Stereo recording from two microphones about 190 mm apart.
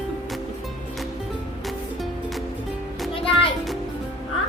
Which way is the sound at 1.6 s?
Centre (ahead or behind).